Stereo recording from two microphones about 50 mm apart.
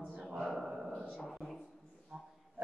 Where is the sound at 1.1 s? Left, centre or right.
Centre.